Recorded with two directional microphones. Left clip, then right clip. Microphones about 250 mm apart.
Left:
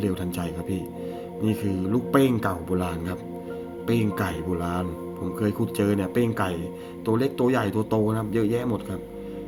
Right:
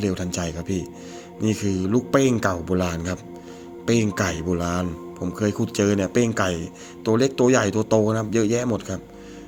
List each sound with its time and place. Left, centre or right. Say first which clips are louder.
0.0 s speech: right 3 dB; right